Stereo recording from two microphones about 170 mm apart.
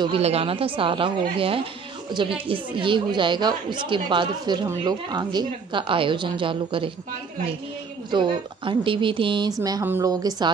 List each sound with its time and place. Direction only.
0.0 s a woman's voice: 35° right (ahead or behind)
8.1 s a woman's voice: 30° right (ahead or behind)